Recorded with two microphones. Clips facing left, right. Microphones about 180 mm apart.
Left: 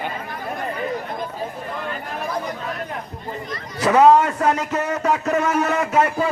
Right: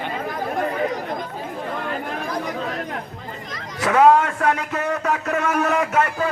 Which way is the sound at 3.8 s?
Centre (ahead or behind).